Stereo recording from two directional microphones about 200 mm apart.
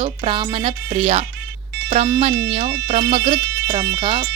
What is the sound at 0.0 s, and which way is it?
Speech, 25° right (ahead or behind).